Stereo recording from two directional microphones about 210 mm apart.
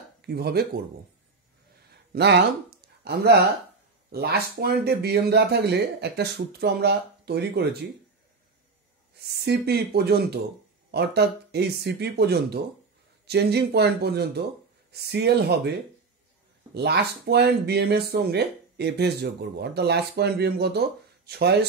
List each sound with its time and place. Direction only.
0.2 s speech: 50° right (ahead or behind)
2.1 s speech: 55° right (ahead or behind)
9.1 s speech: 50° right (ahead or behind)
16.7 s speech: 50° right (ahead or behind)